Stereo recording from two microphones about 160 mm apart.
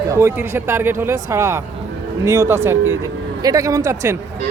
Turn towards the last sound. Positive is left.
turn(degrees=-20)  # may be behind; listen again after turning